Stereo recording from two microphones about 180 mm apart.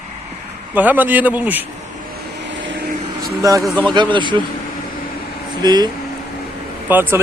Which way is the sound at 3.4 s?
20° right (ahead or behind).